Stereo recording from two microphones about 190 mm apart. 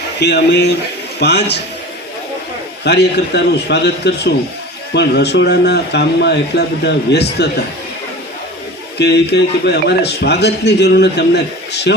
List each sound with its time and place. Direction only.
0.2 s speech: 65° left (ahead or behind)
2.8 s speech: 60° left (ahead or behind)
9.0 s speech: 60° left (ahead or behind)